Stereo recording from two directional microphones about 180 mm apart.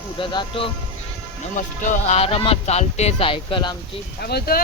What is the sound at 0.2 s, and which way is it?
Speech, 30° left (ahead or behind).